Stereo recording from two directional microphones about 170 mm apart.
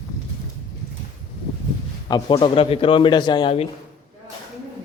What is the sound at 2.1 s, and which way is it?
A man's voice, 30° left (ahead or behind).